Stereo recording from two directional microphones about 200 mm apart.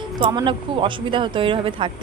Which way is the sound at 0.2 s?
25° right (ahead or behind).